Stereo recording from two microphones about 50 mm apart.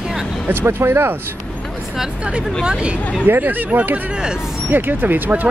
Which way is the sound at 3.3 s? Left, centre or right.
Right.